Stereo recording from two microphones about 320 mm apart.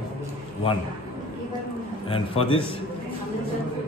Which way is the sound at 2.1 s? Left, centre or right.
Centre.